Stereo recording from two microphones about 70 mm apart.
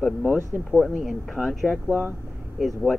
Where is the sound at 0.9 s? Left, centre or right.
Centre.